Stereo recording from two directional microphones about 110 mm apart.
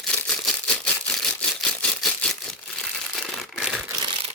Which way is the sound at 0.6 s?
15° left (ahead or behind).